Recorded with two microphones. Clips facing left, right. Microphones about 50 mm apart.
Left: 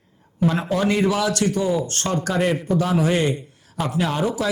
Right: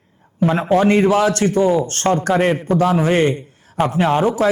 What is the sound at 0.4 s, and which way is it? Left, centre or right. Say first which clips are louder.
A man's voice: right 6 dB; right.